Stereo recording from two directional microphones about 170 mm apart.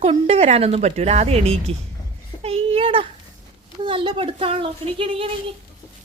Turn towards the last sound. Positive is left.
turn(degrees=-30)  # may be behind; listen again after turning